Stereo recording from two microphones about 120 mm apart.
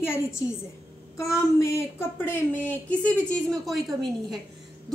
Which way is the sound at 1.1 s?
25° left (ahead or behind).